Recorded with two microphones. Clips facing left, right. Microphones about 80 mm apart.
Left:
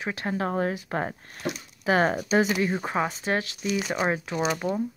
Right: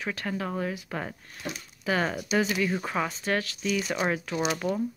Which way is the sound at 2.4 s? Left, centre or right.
Left.